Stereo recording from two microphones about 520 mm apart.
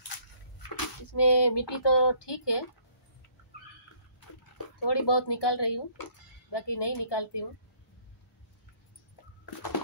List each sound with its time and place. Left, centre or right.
0.7 s speech: left
4.8 s speech: left